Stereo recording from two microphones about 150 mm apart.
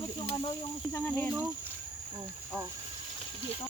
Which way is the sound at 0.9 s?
10° left (ahead or behind).